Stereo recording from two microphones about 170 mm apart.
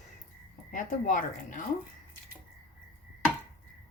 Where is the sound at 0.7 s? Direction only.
50° left (ahead or behind).